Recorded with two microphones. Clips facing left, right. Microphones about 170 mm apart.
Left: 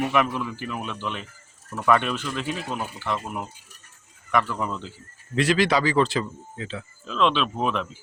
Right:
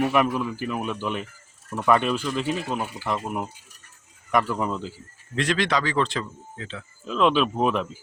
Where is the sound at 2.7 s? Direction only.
10° right (ahead or behind).